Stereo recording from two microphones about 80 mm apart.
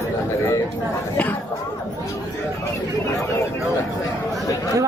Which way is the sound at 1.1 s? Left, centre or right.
Left.